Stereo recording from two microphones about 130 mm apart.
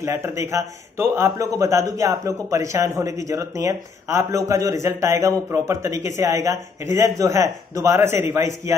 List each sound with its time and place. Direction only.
0.0 s speech: 20° right (ahead or behind)